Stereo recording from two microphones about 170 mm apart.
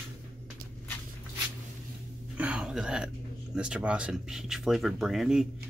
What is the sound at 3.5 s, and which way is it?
Speech, 5° right (ahead or behind).